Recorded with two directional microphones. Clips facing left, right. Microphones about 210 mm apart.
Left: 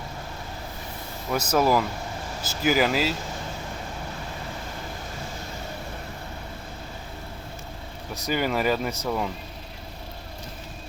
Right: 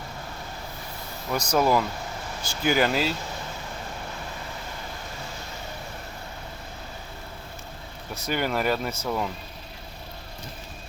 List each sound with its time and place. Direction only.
1.3 s speech: 5° left (ahead or behind)
8.3 s speech: centre (ahead or behind)